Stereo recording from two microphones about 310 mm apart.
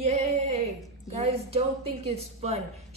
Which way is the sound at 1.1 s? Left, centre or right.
Centre.